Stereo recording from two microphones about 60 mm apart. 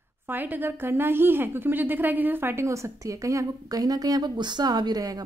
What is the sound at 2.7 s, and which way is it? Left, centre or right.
Speech, right.